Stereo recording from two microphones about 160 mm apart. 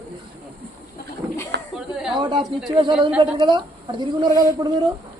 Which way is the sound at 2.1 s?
30° right (ahead or behind).